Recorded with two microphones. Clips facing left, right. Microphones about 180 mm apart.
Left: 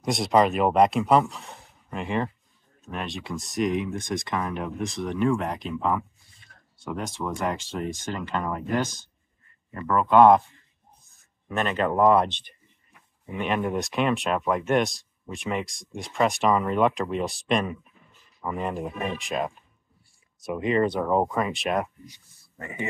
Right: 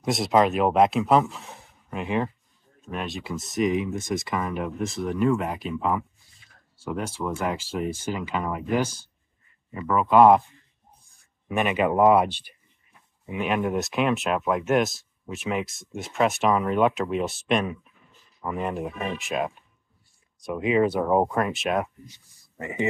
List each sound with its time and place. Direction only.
0.0 s speech: centre (ahead or behind)
22.6 s speech: 20° right (ahead or behind)